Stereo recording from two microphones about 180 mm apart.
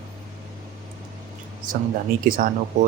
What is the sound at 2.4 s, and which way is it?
Speech, 50° right (ahead or behind).